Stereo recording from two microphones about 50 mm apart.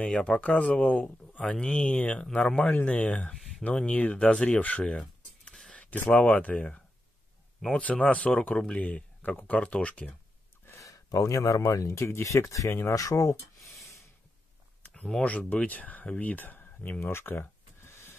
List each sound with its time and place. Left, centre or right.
0.0 s speech: centre
2.0 s speech: left
5.5 s a sound: centre
6.1 s speech: left
7.8 s speech: left
8.5 s speech: centre
8.8 s speech: left
10.7 s speech: left
15.2 s speech: left
17.0 s a sound: left